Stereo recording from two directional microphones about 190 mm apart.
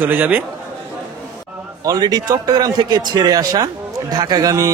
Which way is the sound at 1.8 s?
20° right (ahead or behind).